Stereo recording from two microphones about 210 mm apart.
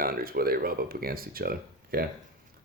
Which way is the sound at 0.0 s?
45° right (ahead or behind).